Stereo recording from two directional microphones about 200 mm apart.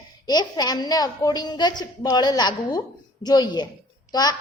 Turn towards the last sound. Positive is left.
turn(degrees=20)  # may be behind; listen again after turning